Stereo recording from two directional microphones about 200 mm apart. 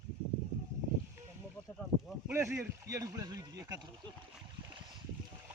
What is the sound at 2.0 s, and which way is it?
Speech, 10° right (ahead or behind).